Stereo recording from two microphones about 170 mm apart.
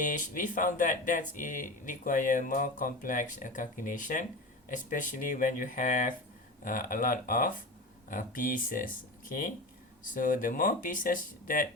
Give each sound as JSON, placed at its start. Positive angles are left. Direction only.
{"t": 0.0, "sound": "speech", "side_deg": 50}